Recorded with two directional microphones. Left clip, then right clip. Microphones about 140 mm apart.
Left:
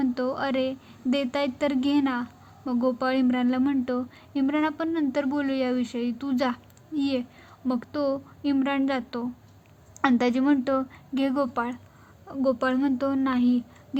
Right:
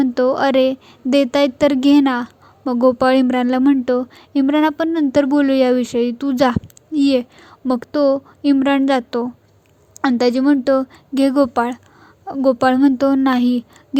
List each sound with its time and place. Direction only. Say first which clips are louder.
0.0 s a woman's voice: right 12 dB; 50° right (ahead or behind)
9.9 s a woman's voice: right 7 dB; 30° right (ahead or behind); by 13.7 s 50° right (ahead or behind)